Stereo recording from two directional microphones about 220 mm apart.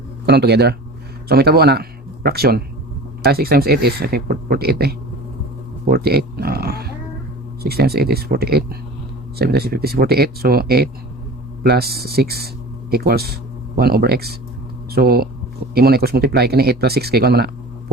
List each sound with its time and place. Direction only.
0.3 s speech: 50° right (ahead or behind)